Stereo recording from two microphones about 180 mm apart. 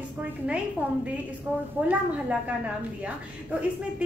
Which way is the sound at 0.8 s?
10° right (ahead or behind).